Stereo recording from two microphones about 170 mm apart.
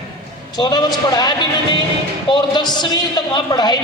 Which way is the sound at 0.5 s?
25° left (ahead or behind).